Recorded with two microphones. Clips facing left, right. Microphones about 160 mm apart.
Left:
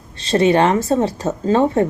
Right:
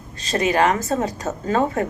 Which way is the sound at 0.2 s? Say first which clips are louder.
Left 5 dB; 30° left (ahead or behind).